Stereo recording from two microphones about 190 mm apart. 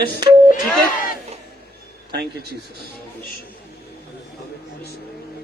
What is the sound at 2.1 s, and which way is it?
Speech, 60° right (ahead or behind).